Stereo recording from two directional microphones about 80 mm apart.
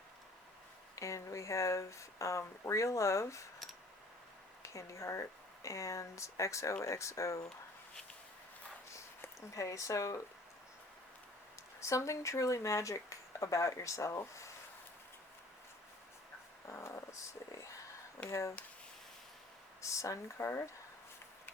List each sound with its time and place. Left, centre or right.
0.9 s speech: left
4.6 s speech: left
8.9 s a sound: left
11.8 s speech: left
16.6 s speech: left
19.8 s speech: left